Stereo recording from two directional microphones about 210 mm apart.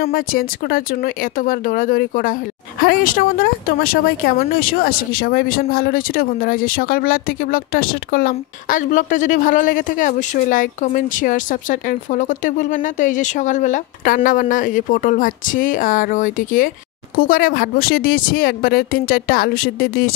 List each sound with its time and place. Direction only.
0.0 s speech: 45° left (ahead or behind)